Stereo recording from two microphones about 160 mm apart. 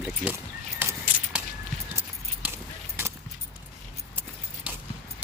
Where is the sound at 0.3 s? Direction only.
10° right (ahead or behind).